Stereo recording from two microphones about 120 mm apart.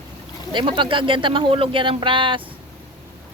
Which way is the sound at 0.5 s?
45° right (ahead or behind).